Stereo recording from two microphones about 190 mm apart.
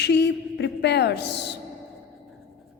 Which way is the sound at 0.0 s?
65° left (ahead or behind).